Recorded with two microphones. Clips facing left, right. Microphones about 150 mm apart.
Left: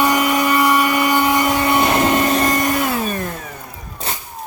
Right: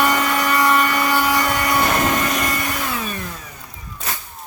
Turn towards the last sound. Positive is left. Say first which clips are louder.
# left 6 dB
turn(degrees=45)  # may be behind; listen again after turning